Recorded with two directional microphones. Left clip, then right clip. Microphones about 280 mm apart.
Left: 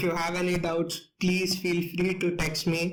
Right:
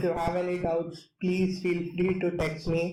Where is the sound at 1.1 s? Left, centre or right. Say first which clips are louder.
Left 2 dB; left.